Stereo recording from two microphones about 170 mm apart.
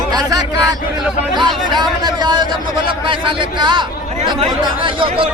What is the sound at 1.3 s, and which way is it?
Speech, 25° right (ahead or behind).